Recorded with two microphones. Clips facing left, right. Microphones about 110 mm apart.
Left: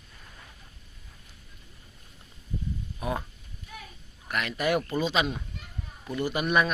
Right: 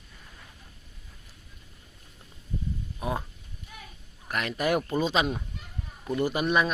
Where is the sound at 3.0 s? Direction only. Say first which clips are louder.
Even; 25° right (ahead or behind).